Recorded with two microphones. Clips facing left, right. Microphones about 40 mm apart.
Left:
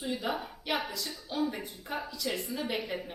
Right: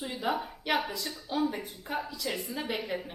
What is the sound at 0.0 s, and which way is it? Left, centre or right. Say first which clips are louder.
A woman's voice: right 2 dB; centre.